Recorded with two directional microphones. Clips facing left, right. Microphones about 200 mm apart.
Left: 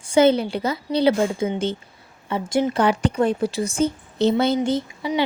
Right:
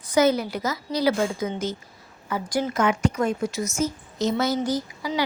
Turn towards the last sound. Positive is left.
turn(degrees=25)  # may be behind; listen again after turning